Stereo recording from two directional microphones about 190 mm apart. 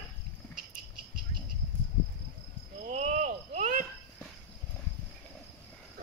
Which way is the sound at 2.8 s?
40° right (ahead or behind).